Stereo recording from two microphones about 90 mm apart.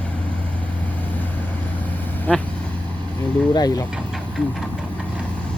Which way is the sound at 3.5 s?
45° left (ahead or behind).